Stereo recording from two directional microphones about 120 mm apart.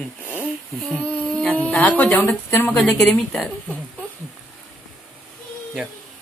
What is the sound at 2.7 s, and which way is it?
Speech, 5° left (ahead or behind).